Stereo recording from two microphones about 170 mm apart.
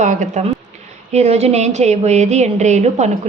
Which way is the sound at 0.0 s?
45° right (ahead or behind).